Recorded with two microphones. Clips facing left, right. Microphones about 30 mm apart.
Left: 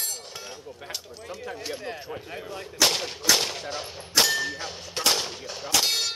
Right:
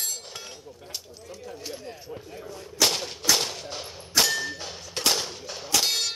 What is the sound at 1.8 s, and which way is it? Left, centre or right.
Speech, left.